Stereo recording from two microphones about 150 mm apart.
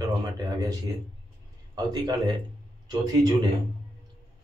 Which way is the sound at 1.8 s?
25° right (ahead or behind).